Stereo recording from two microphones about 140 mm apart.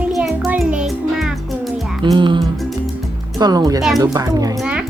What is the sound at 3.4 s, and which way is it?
Speech, 25° right (ahead or behind).